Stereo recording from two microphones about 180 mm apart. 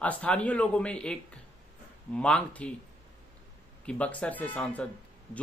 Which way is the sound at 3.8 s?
5° left (ahead or behind).